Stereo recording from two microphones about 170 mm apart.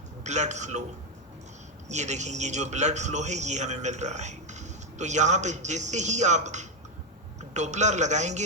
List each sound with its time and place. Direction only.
0.3 s a man's voice: 45° right (ahead or behind)
1.9 s a man's voice: 45° right (ahead or behind)